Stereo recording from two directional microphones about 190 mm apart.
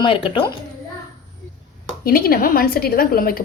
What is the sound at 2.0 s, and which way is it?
A woman's voice, 50° left (ahead or behind).